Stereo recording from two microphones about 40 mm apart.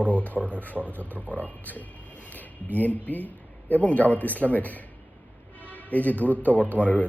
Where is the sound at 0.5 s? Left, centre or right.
Left.